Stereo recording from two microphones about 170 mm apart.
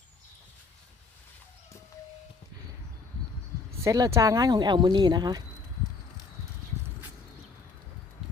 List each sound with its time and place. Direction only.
3.8 s speech: 20° right (ahead or behind)